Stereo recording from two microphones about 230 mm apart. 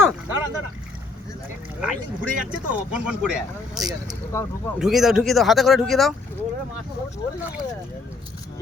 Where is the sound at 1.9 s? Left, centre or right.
Centre.